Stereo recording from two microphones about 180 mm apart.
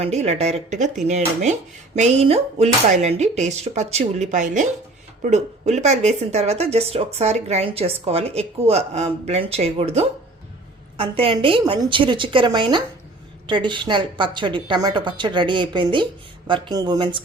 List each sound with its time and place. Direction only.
0.0 s a woman's voice: 35° right (ahead or behind)